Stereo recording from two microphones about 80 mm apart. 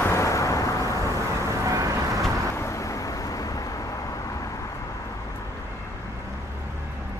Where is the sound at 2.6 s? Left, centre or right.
Left.